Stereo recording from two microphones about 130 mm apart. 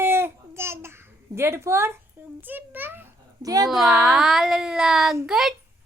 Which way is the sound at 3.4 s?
25° right (ahead or behind).